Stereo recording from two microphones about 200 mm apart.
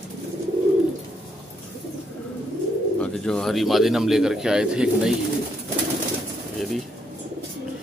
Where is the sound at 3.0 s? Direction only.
5° left (ahead or behind).